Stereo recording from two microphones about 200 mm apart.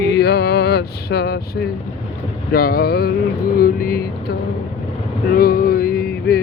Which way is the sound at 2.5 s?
50° left (ahead or behind).